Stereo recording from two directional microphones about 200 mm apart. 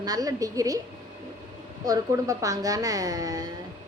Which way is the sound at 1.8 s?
15° right (ahead or behind).